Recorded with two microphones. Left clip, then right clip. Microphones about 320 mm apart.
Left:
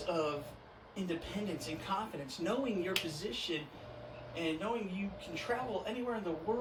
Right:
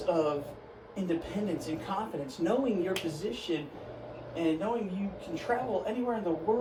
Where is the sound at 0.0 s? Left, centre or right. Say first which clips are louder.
Right 7 dB; centre.